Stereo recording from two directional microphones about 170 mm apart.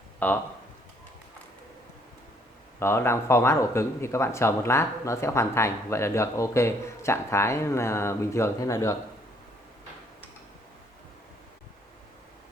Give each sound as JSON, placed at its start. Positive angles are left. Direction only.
{"t": 0.2, "sound": "speech", "side_deg": 10}
{"t": 2.7, "sound": "speech", "side_deg": 15}